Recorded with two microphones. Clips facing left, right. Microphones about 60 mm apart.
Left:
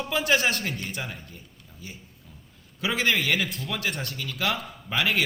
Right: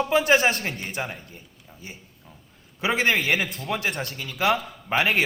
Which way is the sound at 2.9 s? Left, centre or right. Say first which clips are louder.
Right 3 dB; right.